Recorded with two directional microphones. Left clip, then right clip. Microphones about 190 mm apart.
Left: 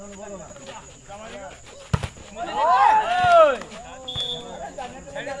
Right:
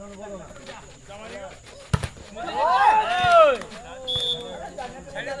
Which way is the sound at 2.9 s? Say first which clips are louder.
Left 1 dB; 45° right (ahead or behind).